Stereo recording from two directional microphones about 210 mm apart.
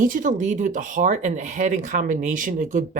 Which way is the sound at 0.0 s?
40° right (ahead or behind).